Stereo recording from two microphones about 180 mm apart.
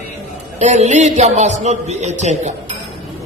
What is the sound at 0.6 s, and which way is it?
Speech, 40° right (ahead or behind).